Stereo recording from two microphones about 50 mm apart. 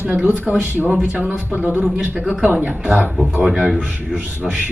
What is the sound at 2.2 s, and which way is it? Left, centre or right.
Speech, right.